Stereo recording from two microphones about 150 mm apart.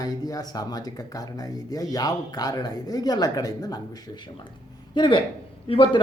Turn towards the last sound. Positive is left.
turn(degrees=35)  # may be behind; listen again after turning